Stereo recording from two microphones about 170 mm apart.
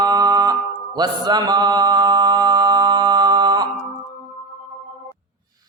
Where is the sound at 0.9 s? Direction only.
25° right (ahead or behind).